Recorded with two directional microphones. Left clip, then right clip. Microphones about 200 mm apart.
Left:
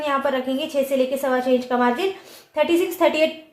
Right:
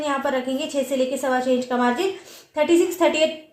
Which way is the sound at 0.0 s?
10° right (ahead or behind).